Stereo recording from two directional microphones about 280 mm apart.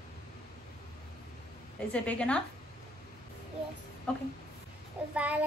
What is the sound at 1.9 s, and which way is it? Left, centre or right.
Child singing, centre.